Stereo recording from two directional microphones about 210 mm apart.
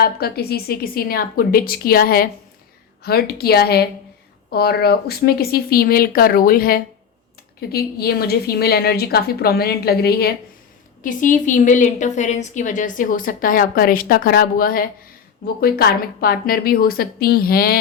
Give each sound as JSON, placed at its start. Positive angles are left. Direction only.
{"t": 0.0, "sound": "a woman's voice", "side_deg": 50}